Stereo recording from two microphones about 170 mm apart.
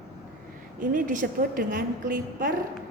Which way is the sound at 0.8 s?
50° right (ahead or behind).